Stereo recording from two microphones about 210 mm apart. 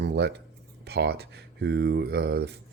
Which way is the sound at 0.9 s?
50° right (ahead or behind).